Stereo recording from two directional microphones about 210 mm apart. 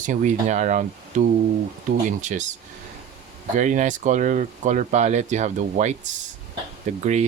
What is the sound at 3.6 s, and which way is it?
Speech, 35° right (ahead or behind).